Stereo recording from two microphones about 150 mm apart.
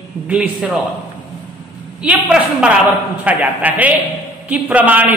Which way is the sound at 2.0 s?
5° right (ahead or behind).